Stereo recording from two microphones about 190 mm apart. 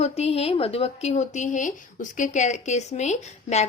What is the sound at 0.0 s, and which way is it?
A woman's voice, 35° left (ahead or behind).